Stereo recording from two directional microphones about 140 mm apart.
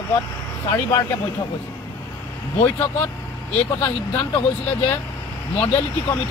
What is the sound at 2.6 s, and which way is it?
Speech, 15° left (ahead or behind).